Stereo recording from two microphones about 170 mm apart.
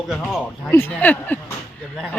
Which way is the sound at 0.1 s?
Centre (ahead or behind).